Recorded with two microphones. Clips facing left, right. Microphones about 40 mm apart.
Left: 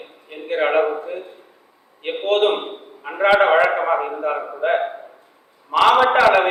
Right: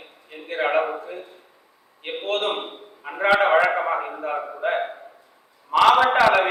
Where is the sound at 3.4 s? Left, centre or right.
Centre.